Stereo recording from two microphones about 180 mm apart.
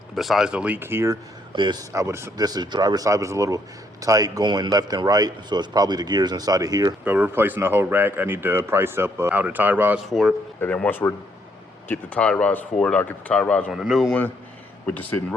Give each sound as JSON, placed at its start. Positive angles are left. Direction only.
{"t": 0.2, "sound": "speech", "side_deg": 0}
{"t": 7.0, "sound": "a man's voice", "side_deg": -10}
{"t": 10.6, "sound": "a man's voice", "side_deg": 10}
{"t": 14.9, "sound": "speech", "side_deg": 10}